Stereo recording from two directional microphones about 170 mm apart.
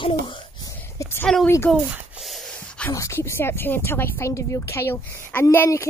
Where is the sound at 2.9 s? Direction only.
15° left (ahead or behind).